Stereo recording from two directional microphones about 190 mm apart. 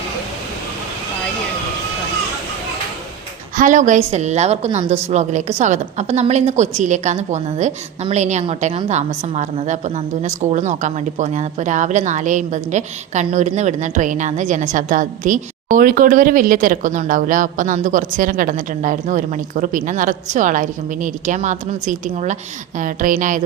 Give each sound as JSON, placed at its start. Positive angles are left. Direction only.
{"t": 3.5, "sound": "a woman's voice", "side_deg": -40}